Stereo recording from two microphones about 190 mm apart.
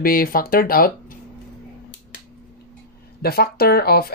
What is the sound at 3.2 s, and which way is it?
Speech, 55° left (ahead or behind).